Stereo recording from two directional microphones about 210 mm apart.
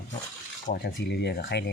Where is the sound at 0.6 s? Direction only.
50° left (ahead or behind).